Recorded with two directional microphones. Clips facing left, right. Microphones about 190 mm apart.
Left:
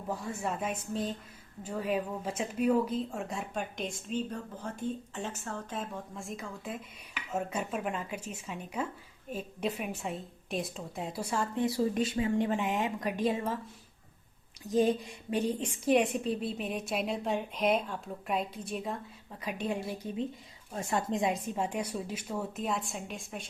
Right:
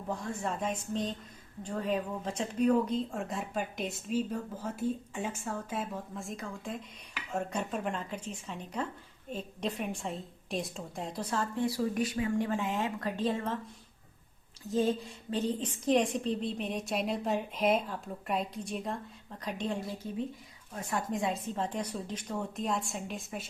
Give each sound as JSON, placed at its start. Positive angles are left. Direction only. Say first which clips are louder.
{"t": 0.1, "sound": "a woman's voice", "louder": "even", "side_deg": 5}
{"t": 14.7, "sound": "a woman's voice", "louder": "left 2 dB", "side_deg": 15}
{"t": 19.8, "sound": "a woman's voice", "louder": "left 1 dB", "side_deg": 20}